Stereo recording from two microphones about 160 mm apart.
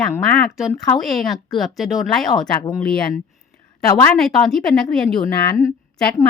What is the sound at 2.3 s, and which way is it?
Speech, 25° left (ahead or behind).